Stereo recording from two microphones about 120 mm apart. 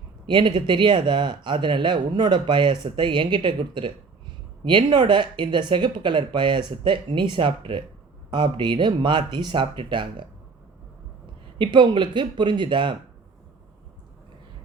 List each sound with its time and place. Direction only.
0.3 s speech: 40° right (ahead or behind)
11.5 s speech: 45° right (ahead or behind)